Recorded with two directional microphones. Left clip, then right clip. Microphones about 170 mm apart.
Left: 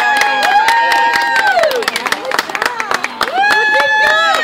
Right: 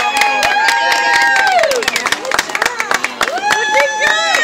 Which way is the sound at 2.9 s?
55° left (ahead or behind).